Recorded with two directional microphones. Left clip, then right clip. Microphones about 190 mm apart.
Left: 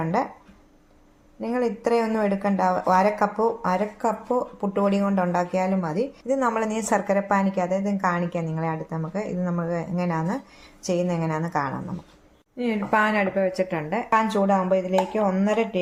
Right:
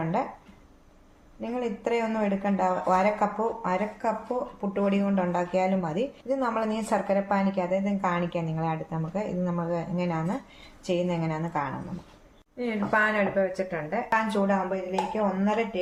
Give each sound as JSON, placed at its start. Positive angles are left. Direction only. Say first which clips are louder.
{"t": 1.4, "sound": "speech", "louder": "left 6 dB", "side_deg": 40}
{"t": 6.2, "sound": "speech", "louder": "left 5 dB", "side_deg": 40}